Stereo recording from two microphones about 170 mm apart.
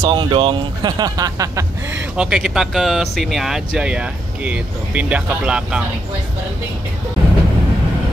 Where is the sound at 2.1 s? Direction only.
5° right (ahead or behind).